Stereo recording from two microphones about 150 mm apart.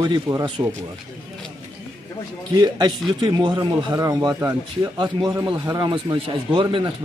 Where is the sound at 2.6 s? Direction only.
30° right (ahead or behind).